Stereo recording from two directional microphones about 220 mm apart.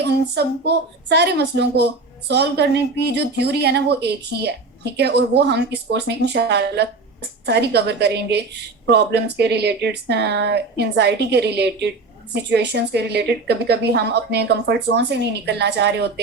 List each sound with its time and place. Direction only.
0.0 s speech: 50° right (ahead or behind)